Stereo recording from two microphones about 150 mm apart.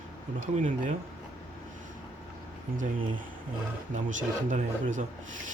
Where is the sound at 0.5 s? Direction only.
55° right (ahead or behind).